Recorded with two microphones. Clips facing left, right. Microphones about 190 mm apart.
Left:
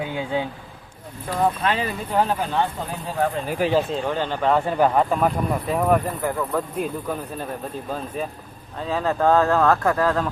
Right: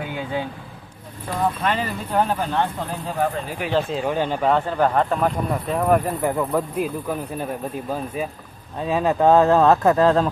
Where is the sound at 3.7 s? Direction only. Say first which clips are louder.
Right 2 dB; centre (ahead or behind).